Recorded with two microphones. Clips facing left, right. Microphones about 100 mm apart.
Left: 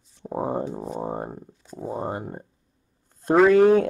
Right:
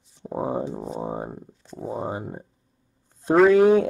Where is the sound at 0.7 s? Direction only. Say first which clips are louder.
Even; centre (ahead or behind).